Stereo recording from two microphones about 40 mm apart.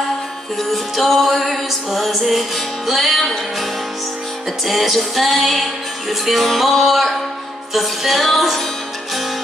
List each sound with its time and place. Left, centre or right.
0.6 s music: centre
4.6 s music: centre